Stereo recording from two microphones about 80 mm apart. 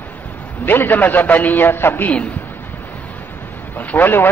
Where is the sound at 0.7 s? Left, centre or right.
Left.